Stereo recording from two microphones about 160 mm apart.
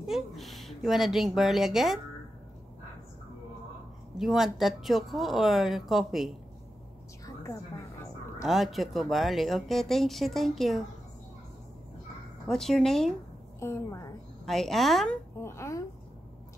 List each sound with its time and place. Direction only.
0.0 s speech: centre (ahead or behind)
4.2 s speech: centre (ahead or behind)
8.4 s speech: centre (ahead or behind)
12.4 s speech: centre (ahead or behind)
13.6 s a woman's voice: 15° left (ahead or behind)
14.4 s speech: centre (ahead or behind)
15.4 s speech: 15° left (ahead or behind)